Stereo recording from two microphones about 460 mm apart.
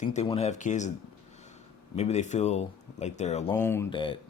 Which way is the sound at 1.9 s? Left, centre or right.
Centre.